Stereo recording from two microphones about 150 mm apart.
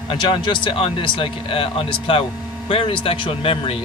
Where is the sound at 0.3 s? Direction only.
35° left (ahead or behind).